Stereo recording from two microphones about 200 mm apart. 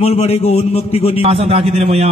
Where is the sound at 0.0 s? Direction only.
30° left (ahead or behind).